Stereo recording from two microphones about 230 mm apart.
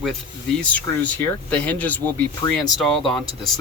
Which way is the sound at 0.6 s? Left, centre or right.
Centre.